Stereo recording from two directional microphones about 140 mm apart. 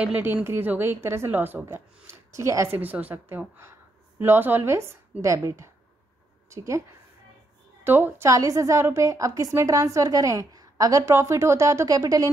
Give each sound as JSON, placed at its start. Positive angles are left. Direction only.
{"t": 0.0, "sound": "a woman's voice", "side_deg": -15}
{"t": 7.8, "sound": "a woman's voice", "side_deg": -15}